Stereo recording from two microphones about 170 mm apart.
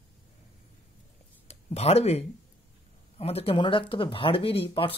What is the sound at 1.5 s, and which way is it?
Speech, 40° left (ahead or behind).